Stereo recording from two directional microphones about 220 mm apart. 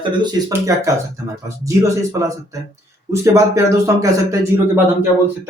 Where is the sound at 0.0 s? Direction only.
20° right (ahead or behind).